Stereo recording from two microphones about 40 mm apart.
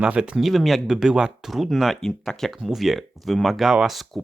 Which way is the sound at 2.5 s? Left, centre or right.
Centre.